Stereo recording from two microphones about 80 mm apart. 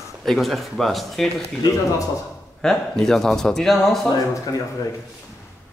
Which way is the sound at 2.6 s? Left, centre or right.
Centre.